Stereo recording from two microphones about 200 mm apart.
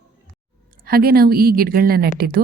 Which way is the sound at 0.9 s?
50° right (ahead or behind).